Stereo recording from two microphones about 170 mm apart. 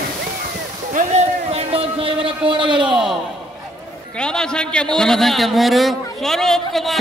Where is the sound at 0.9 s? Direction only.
45° right (ahead or behind).